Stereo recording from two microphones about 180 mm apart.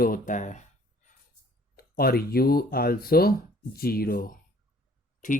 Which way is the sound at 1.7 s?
55° left (ahead or behind).